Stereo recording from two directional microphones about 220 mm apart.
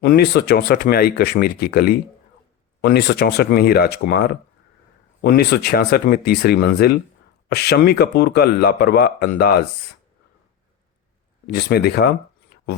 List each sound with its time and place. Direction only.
0.0 s speech: 45° left (ahead or behind)
11.4 s speech: 45° left (ahead or behind)